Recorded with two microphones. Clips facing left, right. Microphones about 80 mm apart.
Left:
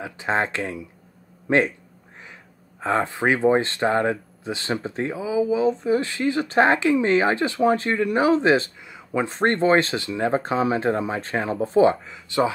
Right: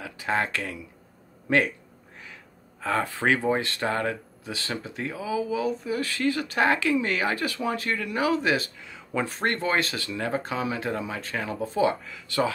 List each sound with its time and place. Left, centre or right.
0.0 s speech: left
2.8 s speech: left
8.8 s speech: centre